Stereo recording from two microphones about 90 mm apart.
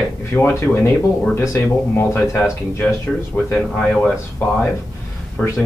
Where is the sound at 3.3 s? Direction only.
15° left (ahead or behind).